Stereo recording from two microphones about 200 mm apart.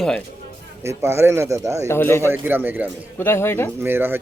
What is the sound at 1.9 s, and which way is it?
Speech, 10° left (ahead or behind).